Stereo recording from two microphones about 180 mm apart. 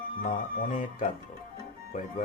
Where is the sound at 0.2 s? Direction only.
50° left (ahead or behind).